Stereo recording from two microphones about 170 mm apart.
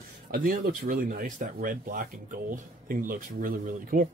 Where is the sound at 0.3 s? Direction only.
60° right (ahead or behind).